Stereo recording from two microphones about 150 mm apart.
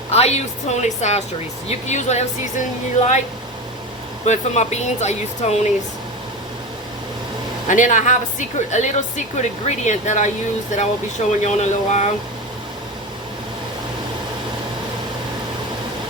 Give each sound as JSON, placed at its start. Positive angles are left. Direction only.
{"t": 0.1, "sound": "a woman's voice", "side_deg": 45}
{"t": 4.3, "sound": "a woman's voice", "side_deg": 50}
{"t": 7.7, "sound": "a woman's voice", "side_deg": 55}